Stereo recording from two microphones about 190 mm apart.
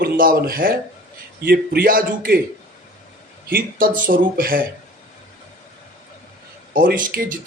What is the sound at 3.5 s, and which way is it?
Speech, 45° right (ahead or behind).